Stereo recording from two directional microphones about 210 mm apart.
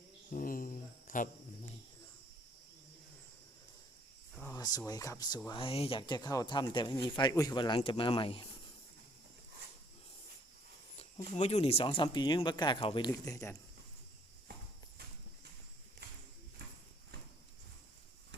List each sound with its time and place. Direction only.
0.3 s cricket: 40° left (ahead or behind)
4.4 s cricket: 15° left (ahead or behind)
4.9 s speech: 15° left (ahead or behind)
10.9 s speech: 30° left (ahead or behind)